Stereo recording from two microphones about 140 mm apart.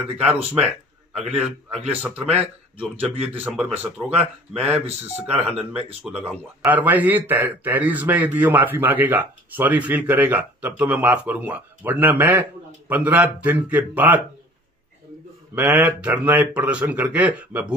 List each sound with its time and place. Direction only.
0.2 s a man's voice: 10° right (ahead or behind)
6.0 s speech: 5° right (ahead or behind)
15.5 s speech: 10° right (ahead or behind)